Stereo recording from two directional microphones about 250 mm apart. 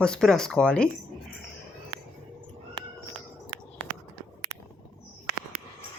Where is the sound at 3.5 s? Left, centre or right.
Right.